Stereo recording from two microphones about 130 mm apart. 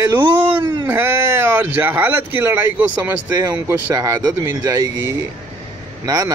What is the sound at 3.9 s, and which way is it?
Speech, 25° right (ahead or behind).